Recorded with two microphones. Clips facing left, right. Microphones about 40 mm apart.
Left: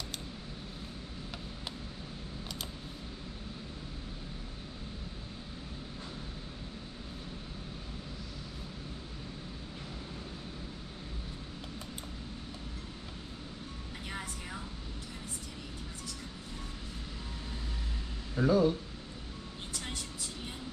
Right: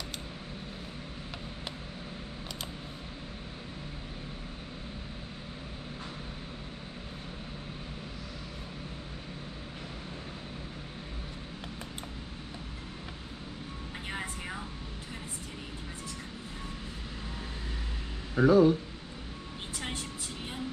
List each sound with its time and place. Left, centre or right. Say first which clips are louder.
14.0 s vehicle: right 4 dB; right
18.3 s speech: right 5 dB; right
19.7 s vehicle: right 4 dB; right